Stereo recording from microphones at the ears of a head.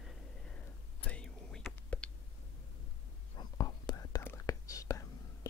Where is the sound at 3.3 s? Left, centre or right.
Left.